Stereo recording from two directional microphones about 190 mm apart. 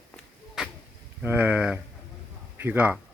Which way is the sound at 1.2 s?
10° right (ahead or behind).